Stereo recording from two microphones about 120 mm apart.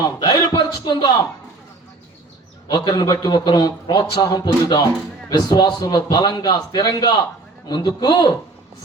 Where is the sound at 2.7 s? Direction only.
35° left (ahead or behind).